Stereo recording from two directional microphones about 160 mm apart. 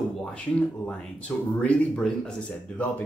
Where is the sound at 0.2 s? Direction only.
5° left (ahead or behind).